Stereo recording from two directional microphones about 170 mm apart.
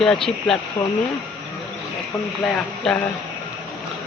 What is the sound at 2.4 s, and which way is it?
Speech, 5° left (ahead or behind).